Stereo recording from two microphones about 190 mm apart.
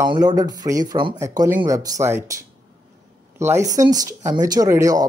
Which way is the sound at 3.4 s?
15° right (ahead or behind).